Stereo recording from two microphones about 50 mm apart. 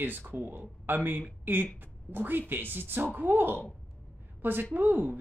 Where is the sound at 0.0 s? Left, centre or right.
Right.